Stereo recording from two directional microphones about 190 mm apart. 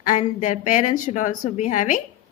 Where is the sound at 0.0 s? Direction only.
40° left (ahead or behind).